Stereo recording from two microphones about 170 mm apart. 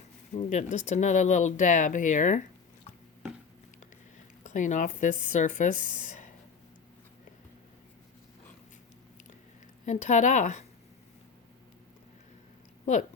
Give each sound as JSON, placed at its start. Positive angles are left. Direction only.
{"t": 0.3, "sound": "speech", "side_deg": 45}
{"t": 4.4, "sound": "speech", "side_deg": 50}
{"t": 9.8, "sound": "speech", "side_deg": 45}
{"t": 12.8, "sound": "speech", "side_deg": 45}